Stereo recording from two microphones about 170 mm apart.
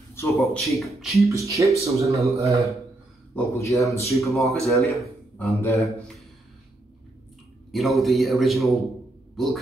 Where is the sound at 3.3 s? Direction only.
15° left (ahead or behind).